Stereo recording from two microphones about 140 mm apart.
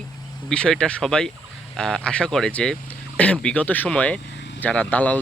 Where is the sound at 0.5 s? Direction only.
5° left (ahead or behind).